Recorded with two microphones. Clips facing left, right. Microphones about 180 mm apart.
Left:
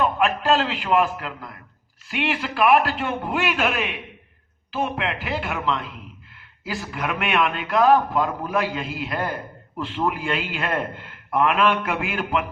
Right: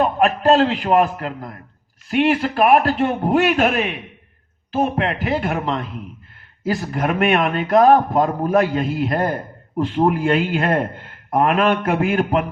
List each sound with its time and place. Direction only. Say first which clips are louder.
0.0 s a man's voice: right 5 dB; 40° right (ahead or behind)